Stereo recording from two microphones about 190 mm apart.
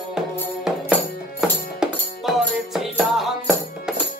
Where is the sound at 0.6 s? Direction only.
5° right (ahead or behind).